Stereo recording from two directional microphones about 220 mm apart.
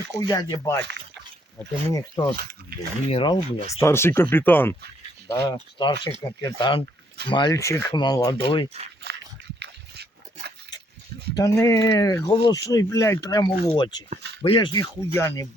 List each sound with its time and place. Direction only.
0.3 s speech: 15° left (ahead or behind)
0.8 s speech: 50° right (ahead or behind)
1.9 s speech: 15° left (ahead or behind)
2.3 s speech: 45° right (ahead or behind)
3.1 s speech: 25° left (ahead or behind)
3.8 s speech: 10° left (ahead or behind)
9.0 s a sound: 50° right (ahead or behind)
9.6 s dog: 50° right (ahead or behind)
11.3 s speech: 15° left (ahead or behind)